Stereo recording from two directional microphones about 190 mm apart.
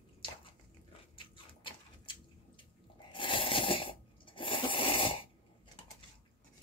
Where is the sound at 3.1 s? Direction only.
25° left (ahead or behind).